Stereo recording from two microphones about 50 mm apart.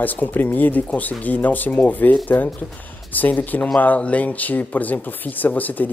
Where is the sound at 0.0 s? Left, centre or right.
Left.